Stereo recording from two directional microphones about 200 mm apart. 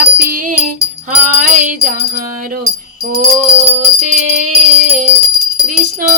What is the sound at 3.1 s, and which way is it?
Music, 50° right (ahead or behind).